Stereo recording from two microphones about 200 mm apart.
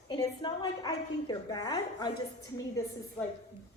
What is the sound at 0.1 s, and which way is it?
A woman's voice, 20° left (ahead or behind).